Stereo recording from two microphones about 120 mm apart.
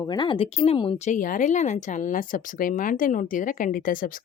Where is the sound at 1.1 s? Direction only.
90° left.